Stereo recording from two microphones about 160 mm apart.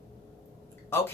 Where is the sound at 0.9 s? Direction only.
15° left (ahead or behind).